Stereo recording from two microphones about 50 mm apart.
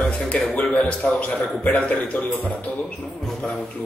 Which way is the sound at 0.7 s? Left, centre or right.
Left.